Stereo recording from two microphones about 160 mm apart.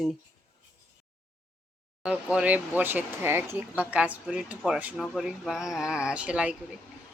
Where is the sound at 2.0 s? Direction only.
5° right (ahead or behind).